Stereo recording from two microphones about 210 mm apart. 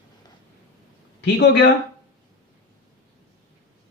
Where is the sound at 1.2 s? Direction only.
50° left (ahead or behind).